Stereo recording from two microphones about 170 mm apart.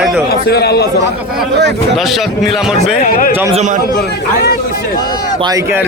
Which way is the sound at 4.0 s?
65° left (ahead or behind).